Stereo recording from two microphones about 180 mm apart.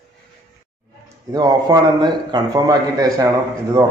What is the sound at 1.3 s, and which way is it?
Speech, 20° right (ahead or behind).